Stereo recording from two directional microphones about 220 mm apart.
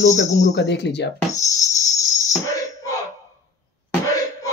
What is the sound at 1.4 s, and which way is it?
Music, 15° left (ahead or behind).